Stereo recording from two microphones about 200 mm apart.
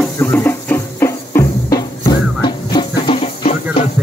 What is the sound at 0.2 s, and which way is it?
Music, 10° left (ahead or behind).